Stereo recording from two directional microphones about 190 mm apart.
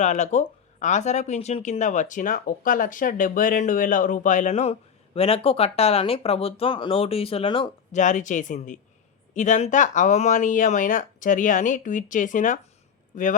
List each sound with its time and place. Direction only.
0.0 s speech: 40° left (ahead or behind)
7.9 s speech: 40° left (ahead or behind)